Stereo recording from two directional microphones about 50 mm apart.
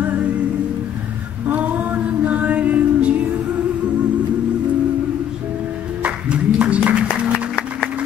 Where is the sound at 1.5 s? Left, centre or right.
Right.